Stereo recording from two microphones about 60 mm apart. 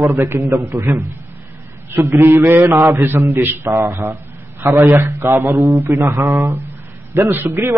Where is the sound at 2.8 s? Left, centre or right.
Right.